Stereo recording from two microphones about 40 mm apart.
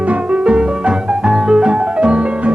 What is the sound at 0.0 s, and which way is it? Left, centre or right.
Music, right.